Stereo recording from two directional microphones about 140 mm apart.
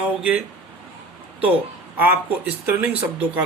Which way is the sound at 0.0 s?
10° right (ahead or behind).